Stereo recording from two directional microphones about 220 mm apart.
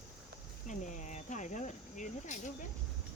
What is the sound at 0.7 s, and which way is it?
Insect, 35° left (ahead or behind).